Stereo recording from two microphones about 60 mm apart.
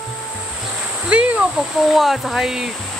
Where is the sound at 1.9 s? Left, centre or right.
Centre.